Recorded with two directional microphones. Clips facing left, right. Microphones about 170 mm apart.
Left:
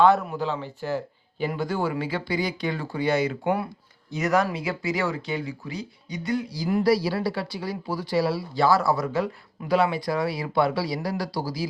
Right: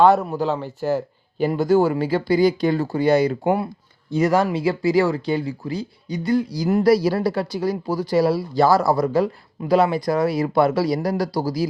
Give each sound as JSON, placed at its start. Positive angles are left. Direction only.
{"t": 0.0, "sound": "speech", "side_deg": -40}